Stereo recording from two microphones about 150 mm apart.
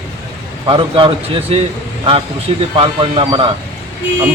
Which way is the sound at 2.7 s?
35° right (ahead or behind).